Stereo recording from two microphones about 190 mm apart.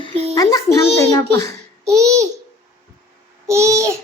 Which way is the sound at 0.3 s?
15° left (ahead or behind).